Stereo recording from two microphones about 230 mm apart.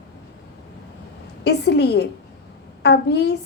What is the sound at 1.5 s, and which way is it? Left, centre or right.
A woman's voice, left.